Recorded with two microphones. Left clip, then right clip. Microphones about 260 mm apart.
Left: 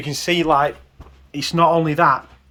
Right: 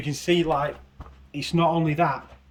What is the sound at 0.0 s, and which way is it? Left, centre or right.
Speech, centre.